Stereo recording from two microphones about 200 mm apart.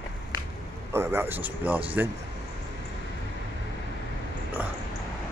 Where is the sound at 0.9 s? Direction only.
10° right (ahead or behind).